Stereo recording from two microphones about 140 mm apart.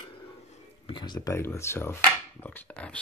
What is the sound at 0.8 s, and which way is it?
Speech, 35° left (ahead or behind).